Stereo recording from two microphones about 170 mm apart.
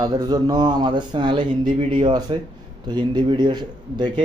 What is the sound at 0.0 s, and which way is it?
A man's voice, 25° right (ahead or behind).